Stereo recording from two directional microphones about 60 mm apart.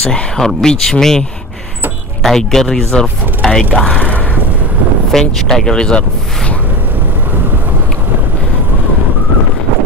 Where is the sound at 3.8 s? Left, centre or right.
Left.